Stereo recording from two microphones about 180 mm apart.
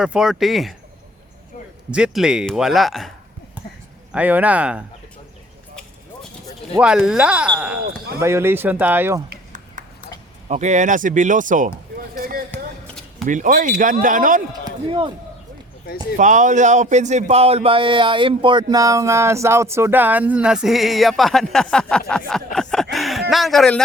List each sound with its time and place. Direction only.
0.0 s speech: 5° right (ahead or behind)
1.9 s speech: 5° right (ahead or behind)
4.1 s speech: 10° right (ahead or behind)
6.7 s speech: 5° right (ahead or behind)
9.8 s horse: 45° right (ahead or behind)
10.5 s speech: 40° right (ahead or behind)
14.6 s speech: 25° right (ahead or behind)
16.1 s speech: 45° right (ahead or behind); by 23.8 s 5° left (ahead or behind)